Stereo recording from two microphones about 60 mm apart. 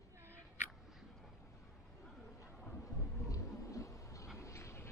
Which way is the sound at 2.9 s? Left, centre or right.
Left.